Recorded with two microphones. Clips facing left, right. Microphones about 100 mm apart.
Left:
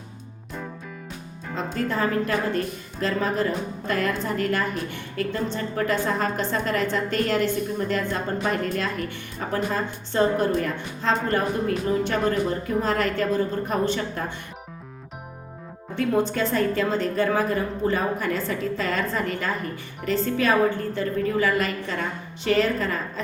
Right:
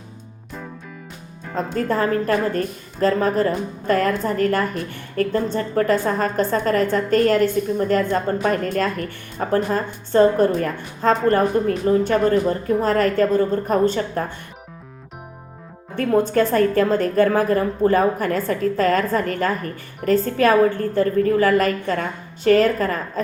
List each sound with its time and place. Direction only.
1.5 s a woman's voice: 45° right (ahead or behind)
16.0 s a woman's voice: 50° right (ahead or behind)